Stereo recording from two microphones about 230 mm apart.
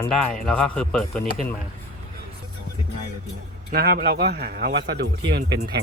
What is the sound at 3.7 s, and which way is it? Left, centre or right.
Speech, right.